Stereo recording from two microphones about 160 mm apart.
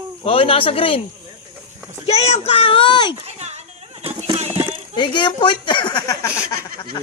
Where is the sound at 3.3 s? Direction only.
45° right (ahead or behind).